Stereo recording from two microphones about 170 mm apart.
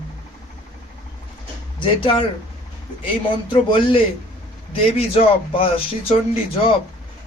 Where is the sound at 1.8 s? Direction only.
30° left (ahead or behind).